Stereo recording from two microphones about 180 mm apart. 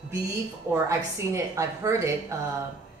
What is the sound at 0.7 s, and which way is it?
A woman's voice, 15° right (ahead or behind).